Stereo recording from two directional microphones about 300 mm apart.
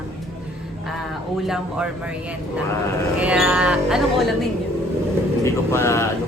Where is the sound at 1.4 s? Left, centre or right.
Centre.